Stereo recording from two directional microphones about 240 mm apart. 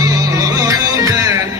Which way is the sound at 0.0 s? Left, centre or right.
Centre.